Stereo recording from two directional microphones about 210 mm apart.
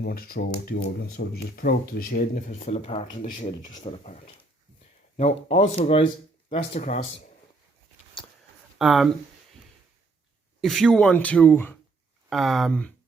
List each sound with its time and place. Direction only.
0.0 s speech: 45° left (ahead or behind)
2.5 s speech: 30° left (ahead or behind)
5.5 s speech: 30° left (ahead or behind)
7.0 s speech: 60° left (ahead or behind)
8.8 s speech: centre (ahead or behind)
10.6 s speech: centre (ahead or behind)